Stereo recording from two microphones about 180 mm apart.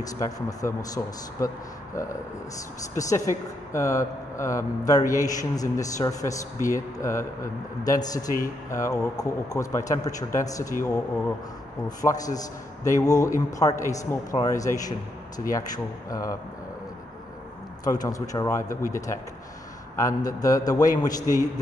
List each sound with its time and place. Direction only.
0.0 s a man's voice: 20° left (ahead or behind)
2.9 s a man's voice: 20° left (ahead or behind)
17.8 s a man's voice: 20° left (ahead or behind)